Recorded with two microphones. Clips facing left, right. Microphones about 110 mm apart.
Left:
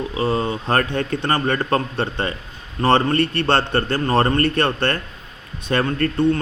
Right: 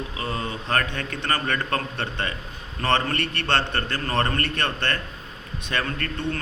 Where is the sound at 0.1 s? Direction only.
30° left (ahead or behind).